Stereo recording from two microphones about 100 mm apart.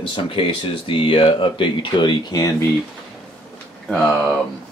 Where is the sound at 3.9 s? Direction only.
5° left (ahead or behind).